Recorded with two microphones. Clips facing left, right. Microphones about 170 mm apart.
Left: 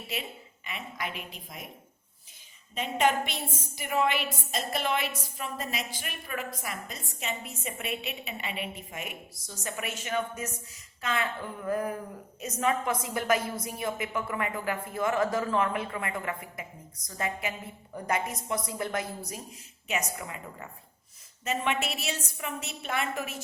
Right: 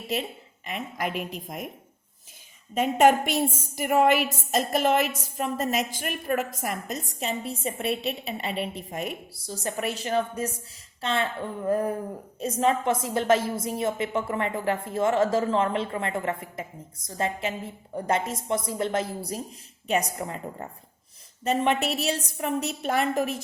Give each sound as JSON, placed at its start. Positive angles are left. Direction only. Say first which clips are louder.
{"t": 0.1, "sound": "a woman's voice", "louder": "right 8 dB", "side_deg": -40}
{"t": 2.7, "sound": "a woman's voice", "louder": "right 7 dB", "side_deg": -45}